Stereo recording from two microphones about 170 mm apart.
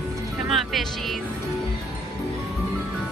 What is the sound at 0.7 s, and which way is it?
Speech, centre (ahead or behind).